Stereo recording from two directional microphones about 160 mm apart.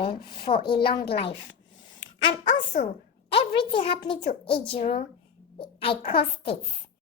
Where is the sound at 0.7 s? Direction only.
30° left (ahead or behind).